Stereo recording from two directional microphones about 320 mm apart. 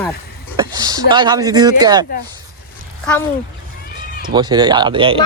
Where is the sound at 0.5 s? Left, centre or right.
Centre.